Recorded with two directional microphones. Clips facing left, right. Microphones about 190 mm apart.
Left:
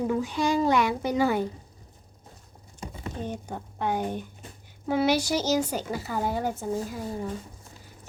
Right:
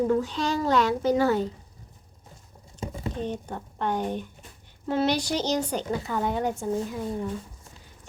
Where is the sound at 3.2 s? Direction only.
10° left (ahead or behind).